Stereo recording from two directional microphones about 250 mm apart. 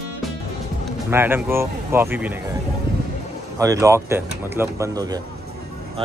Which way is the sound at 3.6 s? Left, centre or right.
Centre.